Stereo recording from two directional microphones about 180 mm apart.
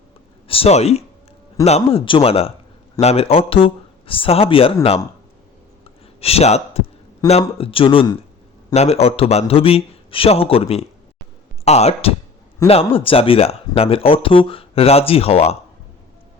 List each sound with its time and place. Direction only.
0.4 s speech: 30° left (ahead or behind)
5.8 s a sound: 35° left (ahead or behind)
7.3 s speech: 35° left (ahead or behind)